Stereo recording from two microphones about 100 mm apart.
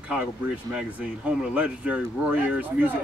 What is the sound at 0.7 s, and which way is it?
A man's voice, 10° right (ahead or behind).